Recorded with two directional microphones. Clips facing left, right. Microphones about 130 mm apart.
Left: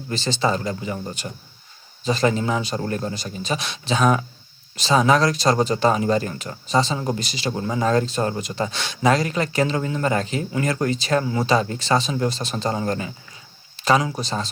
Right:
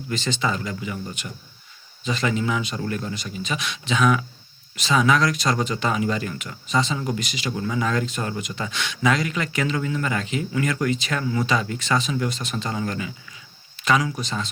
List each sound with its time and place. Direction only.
0.1 s speech: 35° left (ahead or behind)